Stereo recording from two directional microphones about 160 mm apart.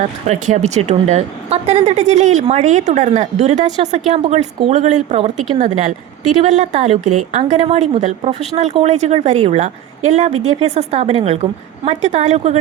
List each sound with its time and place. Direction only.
0.3 s a woman's voice: 45° right (ahead or behind)